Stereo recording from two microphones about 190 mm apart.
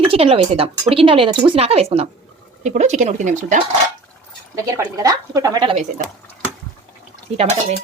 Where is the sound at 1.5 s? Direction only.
30° right (ahead or behind).